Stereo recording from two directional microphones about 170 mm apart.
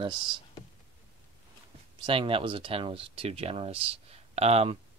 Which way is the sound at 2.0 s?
30° right (ahead or behind).